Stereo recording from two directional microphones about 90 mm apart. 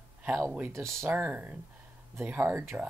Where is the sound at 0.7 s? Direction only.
30° right (ahead or behind).